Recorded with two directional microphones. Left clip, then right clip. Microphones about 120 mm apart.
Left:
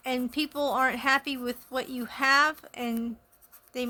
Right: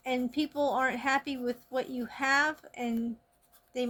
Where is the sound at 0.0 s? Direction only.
55° left (ahead or behind).